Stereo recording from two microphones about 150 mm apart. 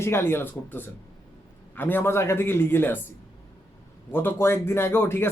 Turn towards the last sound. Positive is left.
turn(degrees=15)  # may be behind; listen again after turning